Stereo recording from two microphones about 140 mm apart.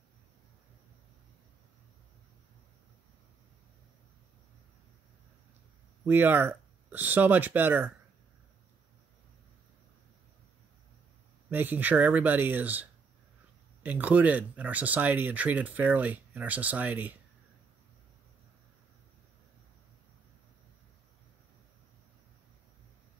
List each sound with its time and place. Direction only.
6.0 s speech: 15° right (ahead or behind)
11.5 s speech: 15° right (ahead or behind)
13.8 s speech: 10° right (ahead or behind)